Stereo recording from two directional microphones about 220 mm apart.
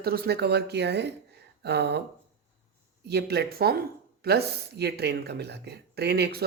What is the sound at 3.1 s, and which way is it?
Speech, 50° right (ahead or behind).